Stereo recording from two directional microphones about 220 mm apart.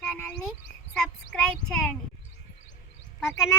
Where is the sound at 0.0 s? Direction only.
5° left (ahead or behind).